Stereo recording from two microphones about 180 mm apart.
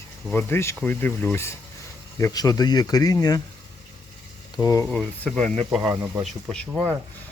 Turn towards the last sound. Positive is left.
turn(degrees=0)  # may be behind; listen again after turning